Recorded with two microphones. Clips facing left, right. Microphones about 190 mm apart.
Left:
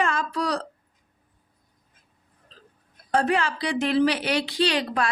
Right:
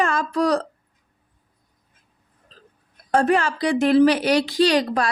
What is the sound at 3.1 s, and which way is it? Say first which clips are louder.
A woman's voice: right 4 dB; 45° right (ahead or behind).